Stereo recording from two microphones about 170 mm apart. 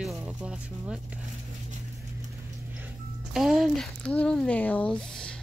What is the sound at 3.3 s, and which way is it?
Speech, centre (ahead or behind).